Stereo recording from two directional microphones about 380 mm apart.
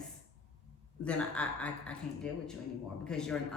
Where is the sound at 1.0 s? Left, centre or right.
Centre.